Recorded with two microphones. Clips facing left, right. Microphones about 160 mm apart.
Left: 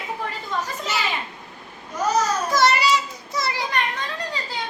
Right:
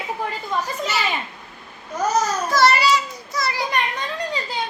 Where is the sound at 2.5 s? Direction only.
20° left (ahead or behind).